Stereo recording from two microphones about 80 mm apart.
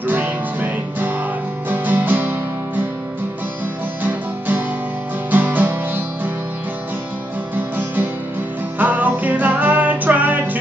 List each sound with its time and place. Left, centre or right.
0.0 s music: right
4.0 s music: right
7.5 s music: right